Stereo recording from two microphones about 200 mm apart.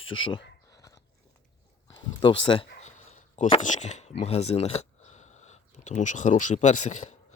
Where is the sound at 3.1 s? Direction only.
35° left (ahead or behind).